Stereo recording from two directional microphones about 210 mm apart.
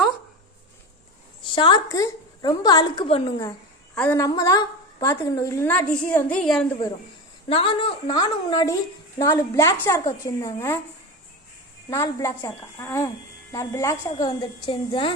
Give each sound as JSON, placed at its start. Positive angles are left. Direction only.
{"t": 1.5, "sound": "a woman's voice", "side_deg": 20}
{"t": 7.4, "sound": "a woman's voice", "side_deg": 25}
{"t": 11.9, "sound": "a woman's voice", "side_deg": 15}